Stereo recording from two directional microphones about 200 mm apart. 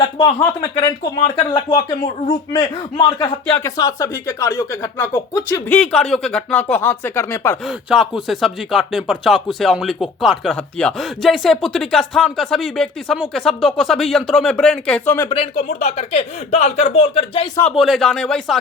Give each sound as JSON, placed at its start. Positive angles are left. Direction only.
{"t": 0.0, "sound": "speech", "side_deg": 20}
{"t": 7.7, "sound": "speech", "side_deg": 0}
{"t": 15.3, "sound": "speech", "side_deg": 30}
{"t": 17.7, "sound": "speech", "side_deg": 0}